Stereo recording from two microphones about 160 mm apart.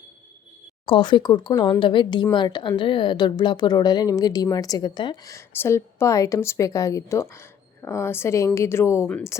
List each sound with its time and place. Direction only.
0.9 s a woman's voice: 30° left (ahead or behind); by 9.3 s 10° left (ahead or behind)